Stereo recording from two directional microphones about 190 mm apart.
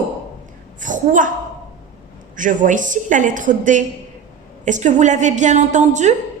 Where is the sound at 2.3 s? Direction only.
45° right (ahead or behind).